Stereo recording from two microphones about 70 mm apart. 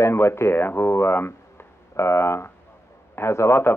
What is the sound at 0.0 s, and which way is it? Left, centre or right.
Speech, left.